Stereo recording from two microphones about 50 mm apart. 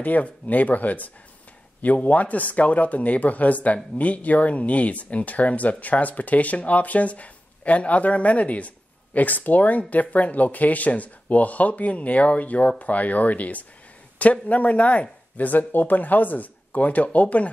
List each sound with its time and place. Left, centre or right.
0.0 s speech: left